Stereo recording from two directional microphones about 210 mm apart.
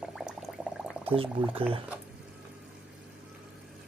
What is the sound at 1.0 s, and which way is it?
Speech, 25° right (ahead or behind).